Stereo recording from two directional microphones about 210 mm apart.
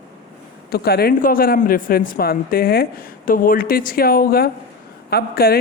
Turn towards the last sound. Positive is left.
turn(degrees=45)  # may be behind; listen again after turning